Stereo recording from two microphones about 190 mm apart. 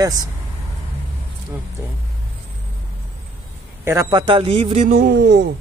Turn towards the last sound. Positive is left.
turn(degrees=-65)  # may be behind; listen again after turning